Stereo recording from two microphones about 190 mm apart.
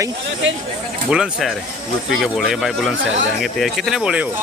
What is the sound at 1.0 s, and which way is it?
Speech, 5° right (ahead or behind).